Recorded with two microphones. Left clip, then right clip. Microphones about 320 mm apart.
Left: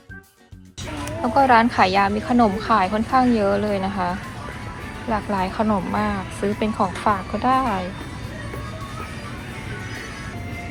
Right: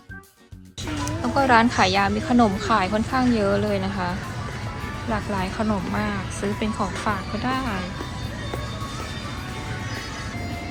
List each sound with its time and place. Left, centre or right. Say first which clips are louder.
1.2 s speech: left 3 dB; centre
5.1 s speech: left 5 dB; centre